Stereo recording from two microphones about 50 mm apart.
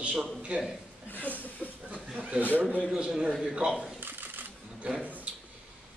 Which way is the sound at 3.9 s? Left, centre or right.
Right.